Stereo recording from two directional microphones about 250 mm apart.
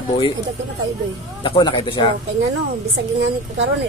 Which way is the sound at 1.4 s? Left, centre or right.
Centre.